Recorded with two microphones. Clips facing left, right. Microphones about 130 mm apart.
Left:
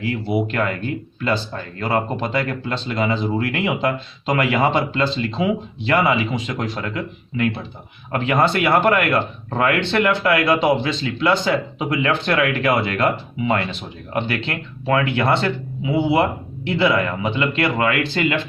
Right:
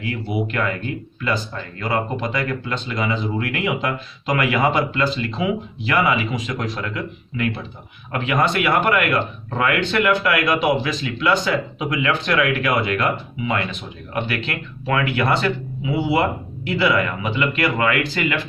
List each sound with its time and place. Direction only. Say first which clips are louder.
0.0 s speech: left 3 dB; 30° left (ahead or behind)